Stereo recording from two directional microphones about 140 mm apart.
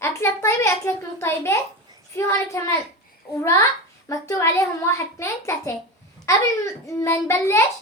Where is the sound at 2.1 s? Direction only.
20° left (ahead or behind).